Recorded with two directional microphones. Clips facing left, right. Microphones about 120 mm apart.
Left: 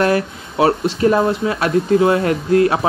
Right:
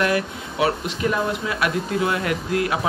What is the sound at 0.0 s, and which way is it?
Speech, 35° left (ahead or behind).